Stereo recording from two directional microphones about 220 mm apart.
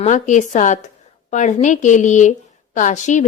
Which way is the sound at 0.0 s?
35° left (ahead or behind).